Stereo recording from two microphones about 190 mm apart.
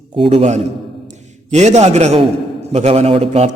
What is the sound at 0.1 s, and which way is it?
A man's voice, 30° right (ahead or behind).